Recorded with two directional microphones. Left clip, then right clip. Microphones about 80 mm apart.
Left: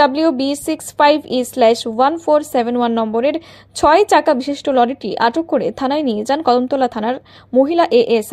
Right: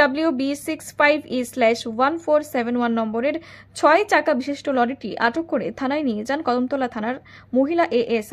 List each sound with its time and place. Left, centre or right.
0.0 s a woman's voice: left